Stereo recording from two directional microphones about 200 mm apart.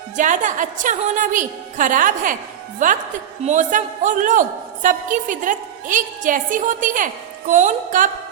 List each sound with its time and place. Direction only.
0.2 s a woman's voice: 40° right (ahead or behind)